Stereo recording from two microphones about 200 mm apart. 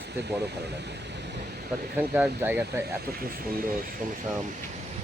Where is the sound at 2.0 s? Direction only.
10° right (ahead or behind).